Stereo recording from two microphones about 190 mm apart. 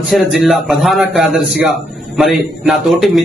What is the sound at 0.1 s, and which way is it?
A man's voice, centre (ahead or behind).